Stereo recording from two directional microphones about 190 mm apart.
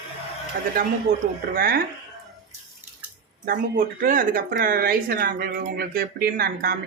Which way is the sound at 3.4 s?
50° right (ahead or behind).